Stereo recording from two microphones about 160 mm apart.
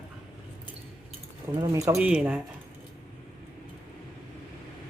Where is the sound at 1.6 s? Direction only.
20° right (ahead or behind).